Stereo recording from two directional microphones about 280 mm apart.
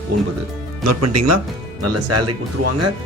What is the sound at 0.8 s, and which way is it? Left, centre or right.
Speech, right.